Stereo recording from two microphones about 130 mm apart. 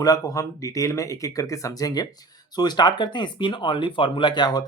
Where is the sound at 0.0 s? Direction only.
25° left (ahead or behind).